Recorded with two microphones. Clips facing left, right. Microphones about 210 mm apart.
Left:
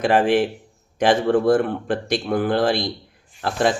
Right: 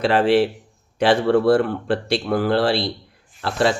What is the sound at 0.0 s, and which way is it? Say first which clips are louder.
Speech: right 1 dB; 15° left (ahead or behind).